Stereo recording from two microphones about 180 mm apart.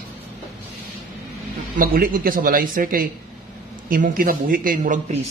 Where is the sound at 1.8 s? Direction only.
50° right (ahead or behind).